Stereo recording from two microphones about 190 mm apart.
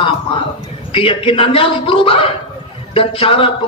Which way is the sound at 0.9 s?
30° left (ahead or behind).